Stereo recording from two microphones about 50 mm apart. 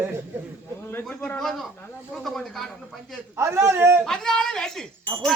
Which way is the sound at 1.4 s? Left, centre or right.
Centre.